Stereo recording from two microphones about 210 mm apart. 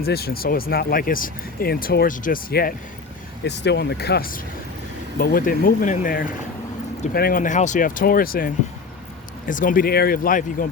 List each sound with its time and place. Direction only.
0.0 s speech: 50° left (ahead or behind)